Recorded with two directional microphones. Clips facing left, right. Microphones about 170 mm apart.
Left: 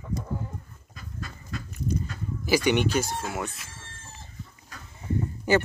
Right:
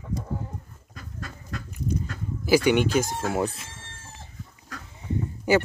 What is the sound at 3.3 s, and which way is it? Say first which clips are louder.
Speech: right 7 dB; 35° right (ahead or behind).